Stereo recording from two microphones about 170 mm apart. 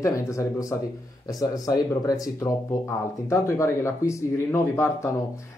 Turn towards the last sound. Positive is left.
turn(degrees=15)  # may be behind; listen again after turning